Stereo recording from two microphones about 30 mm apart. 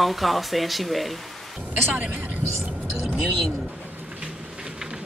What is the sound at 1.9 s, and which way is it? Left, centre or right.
Speech, right.